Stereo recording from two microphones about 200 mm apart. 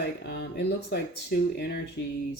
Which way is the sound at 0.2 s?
55° left (ahead or behind).